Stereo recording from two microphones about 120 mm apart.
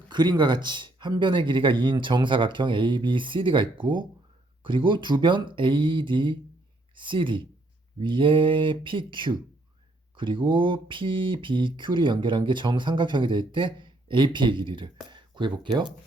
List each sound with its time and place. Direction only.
0.1 s speech: 40° right (ahead or behind)